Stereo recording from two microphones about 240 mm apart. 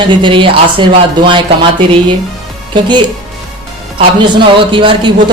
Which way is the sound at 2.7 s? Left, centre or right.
Centre.